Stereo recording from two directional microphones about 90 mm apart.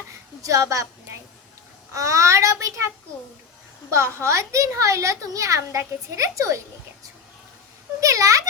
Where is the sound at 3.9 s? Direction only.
30° right (ahead or behind).